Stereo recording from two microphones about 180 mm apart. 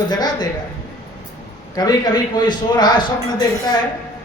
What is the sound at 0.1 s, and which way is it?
Speech, 20° left (ahead or behind).